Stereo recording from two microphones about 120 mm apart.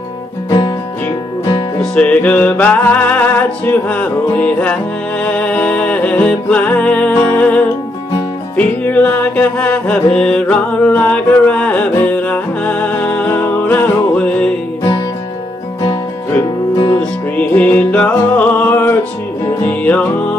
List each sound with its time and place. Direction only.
1.8 s music: 10° left (ahead or behind)
15.8 s music: 25° left (ahead or behind)
16.7 s music: 35° left (ahead or behind)
17.0 s music: 10° left (ahead or behind)